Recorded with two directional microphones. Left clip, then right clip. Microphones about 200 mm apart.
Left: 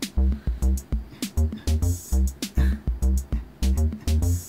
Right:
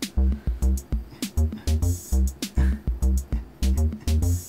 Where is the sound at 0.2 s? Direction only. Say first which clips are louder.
Even; 35° right (ahead or behind).